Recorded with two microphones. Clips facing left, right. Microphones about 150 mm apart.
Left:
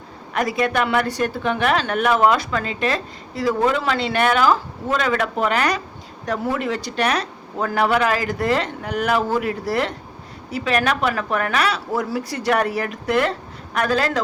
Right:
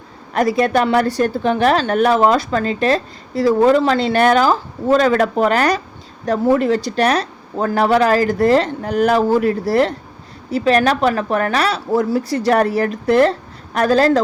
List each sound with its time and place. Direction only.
0.3 s a woman's voice: 35° right (ahead or behind)